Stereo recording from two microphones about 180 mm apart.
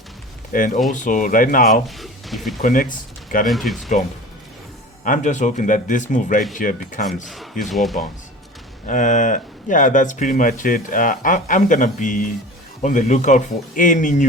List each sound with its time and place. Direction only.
0.5 s speech: 45° left (ahead or behind)
2.0 s speech: centre (ahead or behind)
2.6 s speech: 45° left (ahead or behind)
3.4 s speech: centre (ahead or behind)
5.0 s speech: 45° left (ahead or behind)
7.7 s speech: centre (ahead or behind)
8.9 s speech: 45° left (ahead or behind)